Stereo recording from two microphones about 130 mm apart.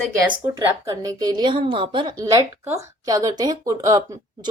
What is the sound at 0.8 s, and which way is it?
A woman's voice, 30° right (ahead or behind).